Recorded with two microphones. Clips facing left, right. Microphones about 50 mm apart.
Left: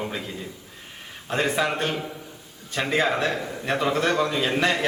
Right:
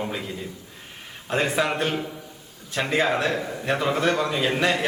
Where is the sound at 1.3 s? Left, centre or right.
Centre.